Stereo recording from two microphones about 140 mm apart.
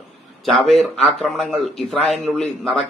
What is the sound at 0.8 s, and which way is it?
A man's voice, centre (ahead or behind).